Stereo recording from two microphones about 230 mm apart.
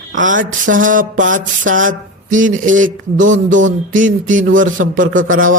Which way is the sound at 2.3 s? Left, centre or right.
Right.